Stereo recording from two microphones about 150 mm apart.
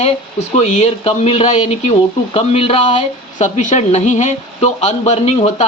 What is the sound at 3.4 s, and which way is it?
Speech, 50° left (ahead or behind).